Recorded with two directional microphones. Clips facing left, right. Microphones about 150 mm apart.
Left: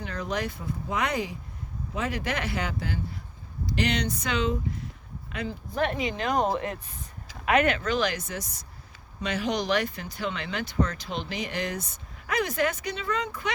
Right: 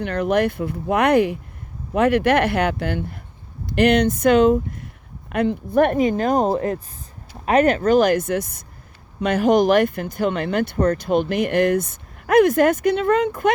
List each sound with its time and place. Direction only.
0.0 s speech: 65° right (ahead or behind)
3.7 s speech: 55° right (ahead or behind)